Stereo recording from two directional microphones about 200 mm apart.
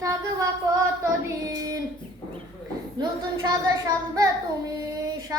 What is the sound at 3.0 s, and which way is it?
Child singing, 20° right (ahead or behind).